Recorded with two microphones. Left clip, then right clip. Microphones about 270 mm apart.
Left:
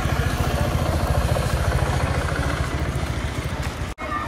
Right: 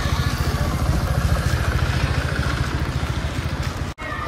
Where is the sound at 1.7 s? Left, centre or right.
Left.